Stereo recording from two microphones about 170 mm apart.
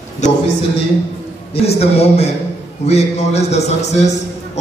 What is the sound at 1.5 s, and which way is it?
Speech, 35° left (ahead or behind).